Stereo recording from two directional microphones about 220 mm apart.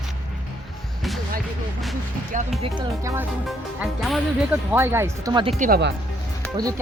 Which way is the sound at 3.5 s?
Centre (ahead or behind).